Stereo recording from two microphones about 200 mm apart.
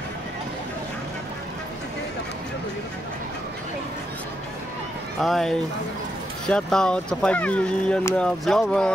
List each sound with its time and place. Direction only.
5.2 s speech: centre (ahead or behind)